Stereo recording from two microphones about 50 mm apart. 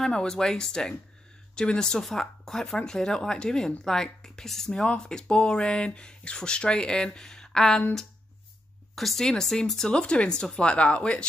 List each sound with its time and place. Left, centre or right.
0.0 s speech: centre
8.9 s speech: centre; by 11.2 s left